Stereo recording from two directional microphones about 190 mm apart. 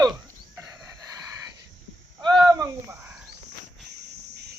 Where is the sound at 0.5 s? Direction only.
15° right (ahead or behind).